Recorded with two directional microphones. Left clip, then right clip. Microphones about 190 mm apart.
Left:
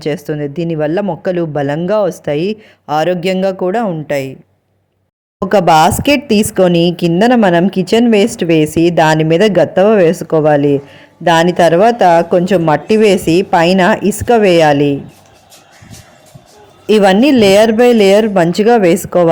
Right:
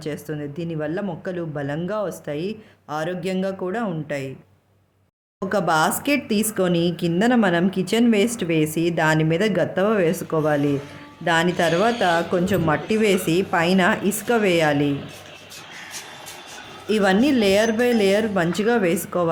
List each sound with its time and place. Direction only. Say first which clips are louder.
0.0 s speech: left 12 dB; 35° left (ahead or behind)
5.4 s speech: left 12 dB; 35° left (ahead or behind)
16.8 s speech: left 11 dB; 35° left (ahead or behind)